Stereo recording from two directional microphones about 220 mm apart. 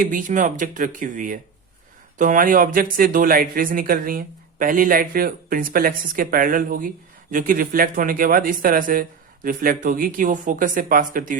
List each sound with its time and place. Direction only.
0.0 s speech: 35° right (ahead or behind)